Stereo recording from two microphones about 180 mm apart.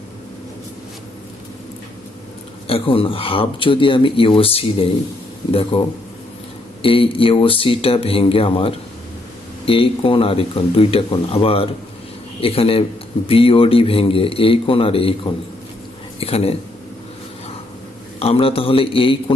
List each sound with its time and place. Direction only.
2.6 s speech: 30° left (ahead or behind)
6.8 s speech: 30° left (ahead or behind)
18.2 s speech: 30° left (ahead or behind)